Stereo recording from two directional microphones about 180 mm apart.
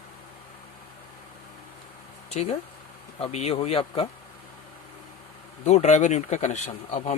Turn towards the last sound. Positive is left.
turn(degrees=40)  # may be behind; listen again after turning